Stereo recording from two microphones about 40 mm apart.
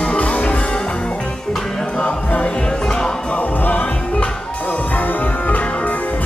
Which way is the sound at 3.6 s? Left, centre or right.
Left.